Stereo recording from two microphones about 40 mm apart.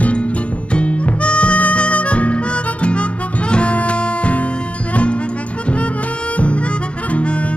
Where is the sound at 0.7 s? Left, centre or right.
Left.